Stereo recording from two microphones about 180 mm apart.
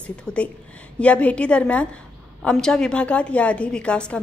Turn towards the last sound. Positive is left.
turn(degrees=5)  # may be behind; listen again after turning